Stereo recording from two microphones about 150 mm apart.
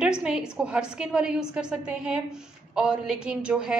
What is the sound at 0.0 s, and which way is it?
A woman's voice, 5° right (ahead or behind).